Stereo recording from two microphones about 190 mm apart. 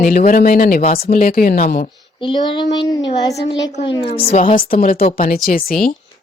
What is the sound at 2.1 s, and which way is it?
Speech, 25° left (ahead or behind).